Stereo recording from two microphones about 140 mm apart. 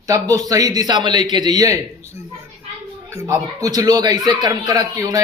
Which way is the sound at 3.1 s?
20° right (ahead or behind).